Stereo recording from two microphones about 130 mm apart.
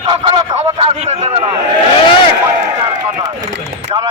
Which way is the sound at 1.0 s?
55° right (ahead or behind).